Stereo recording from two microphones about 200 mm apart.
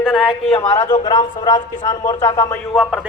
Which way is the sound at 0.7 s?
35° left (ahead or behind).